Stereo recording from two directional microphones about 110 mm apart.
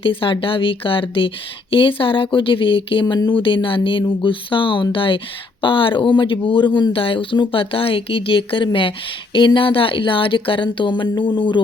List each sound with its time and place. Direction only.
0.0 s speech: 50° left (ahead or behind)